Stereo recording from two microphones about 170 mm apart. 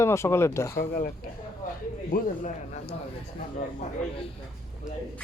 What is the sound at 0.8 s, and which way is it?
Speech, 60° left (ahead or behind).